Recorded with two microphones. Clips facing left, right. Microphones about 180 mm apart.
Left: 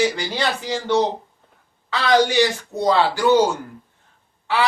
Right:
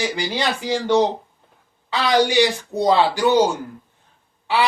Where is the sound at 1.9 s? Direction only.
15° right (ahead or behind).